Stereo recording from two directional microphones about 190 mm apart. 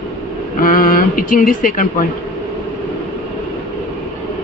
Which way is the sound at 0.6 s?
45° left (ahead or behind).